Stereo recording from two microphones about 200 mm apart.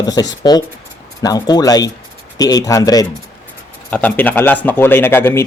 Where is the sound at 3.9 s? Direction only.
10° left (ahead or behind).